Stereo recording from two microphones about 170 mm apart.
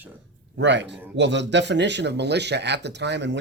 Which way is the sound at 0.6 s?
90° right.